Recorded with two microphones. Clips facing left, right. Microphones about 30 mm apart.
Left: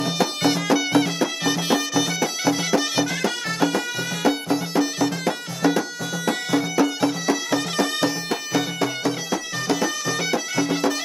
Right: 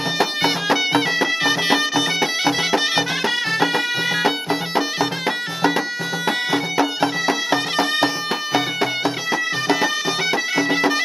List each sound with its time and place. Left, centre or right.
0.2 s music: right